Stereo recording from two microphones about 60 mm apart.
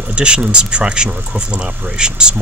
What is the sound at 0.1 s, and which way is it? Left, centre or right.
Speech, centre.